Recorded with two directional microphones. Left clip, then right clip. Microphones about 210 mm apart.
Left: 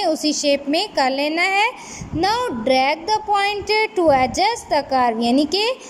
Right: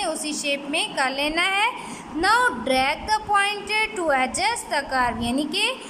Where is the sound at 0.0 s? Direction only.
20° left (ahead or behind).